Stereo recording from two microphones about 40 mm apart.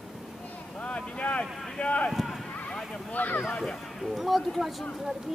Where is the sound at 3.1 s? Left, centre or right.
Left.